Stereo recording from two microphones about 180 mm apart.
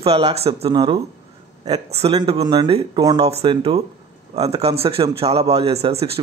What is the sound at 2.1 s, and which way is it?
Speech, 25° right (ahead or behind).